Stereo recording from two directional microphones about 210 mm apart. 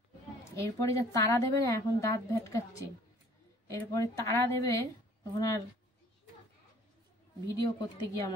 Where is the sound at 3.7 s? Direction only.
15° left (ahead or behind).